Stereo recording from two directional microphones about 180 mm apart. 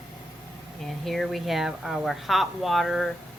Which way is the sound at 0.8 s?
Centre (ahead or behind).